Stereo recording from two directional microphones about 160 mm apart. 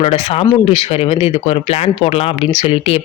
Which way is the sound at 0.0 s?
40° left (ahead or behind).